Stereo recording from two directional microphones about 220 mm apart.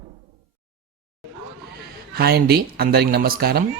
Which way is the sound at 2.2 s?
45° right (ahead or behind).